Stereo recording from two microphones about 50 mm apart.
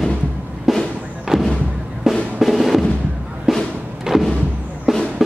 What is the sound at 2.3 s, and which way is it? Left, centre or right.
Drum, centre.